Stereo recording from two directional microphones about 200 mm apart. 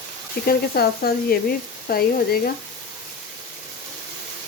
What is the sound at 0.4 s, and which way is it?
Speech, 50° left (ahead or behind).